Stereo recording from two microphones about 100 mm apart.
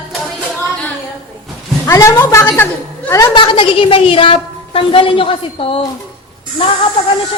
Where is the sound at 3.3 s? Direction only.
55° left (ahead or behind).